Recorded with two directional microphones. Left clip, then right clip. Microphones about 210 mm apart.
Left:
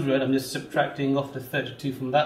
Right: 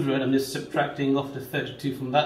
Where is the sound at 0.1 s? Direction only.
25° left (ahead or behind).